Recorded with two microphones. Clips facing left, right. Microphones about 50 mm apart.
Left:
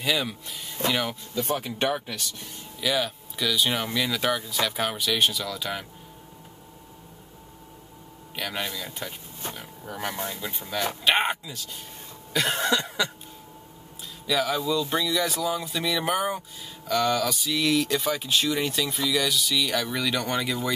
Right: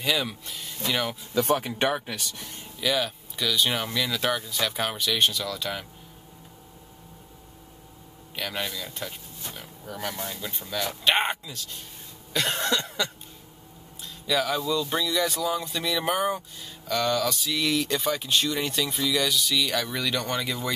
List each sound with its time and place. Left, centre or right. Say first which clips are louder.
0.0 s speech: even; centre
1.6 s speech: right 1 dB; centre
2.8 s speech: even; centre
8.4 s speech: even; centre
12.3 s cough: left 2 dB; centre
14.2 s speech: even; centre